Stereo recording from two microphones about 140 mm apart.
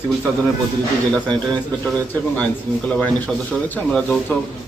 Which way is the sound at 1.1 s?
5° left (ahead or behind).